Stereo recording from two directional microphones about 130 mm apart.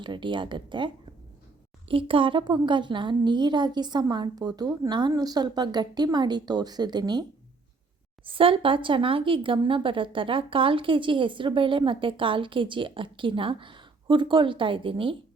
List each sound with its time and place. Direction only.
0.0 s speech: 35° right (ahead or behind)
1.9 s speech: 45° right (ahead or behind)
8.2 s speech: 45° right (ahead or behind)